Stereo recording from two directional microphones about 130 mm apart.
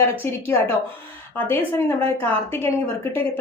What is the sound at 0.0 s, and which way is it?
A woman's voice, 15° left (ahead or behind).